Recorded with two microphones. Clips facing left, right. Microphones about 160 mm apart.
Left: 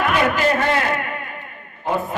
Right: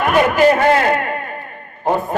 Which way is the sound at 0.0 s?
50° right (ahead or behind).